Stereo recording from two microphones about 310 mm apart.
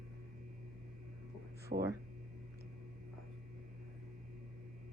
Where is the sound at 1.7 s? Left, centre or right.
Right.